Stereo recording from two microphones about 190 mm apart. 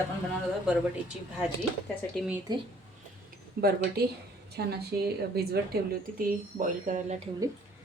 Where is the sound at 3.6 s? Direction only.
55° right (ahead or behind).